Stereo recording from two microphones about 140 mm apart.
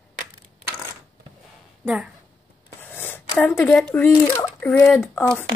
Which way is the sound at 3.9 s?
15° left (ahead or behind).